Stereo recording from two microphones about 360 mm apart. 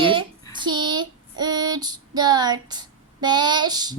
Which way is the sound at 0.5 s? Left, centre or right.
Centre.